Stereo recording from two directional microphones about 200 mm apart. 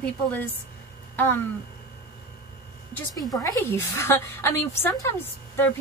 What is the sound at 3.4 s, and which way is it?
Speech, 15° left (ahead or behind).